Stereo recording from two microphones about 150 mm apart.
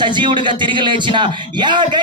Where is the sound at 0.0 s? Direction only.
30° right (ahead or behind).